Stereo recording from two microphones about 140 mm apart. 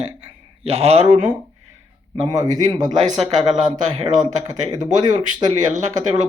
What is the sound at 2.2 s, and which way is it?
Speech, 30° right (ahead or behind).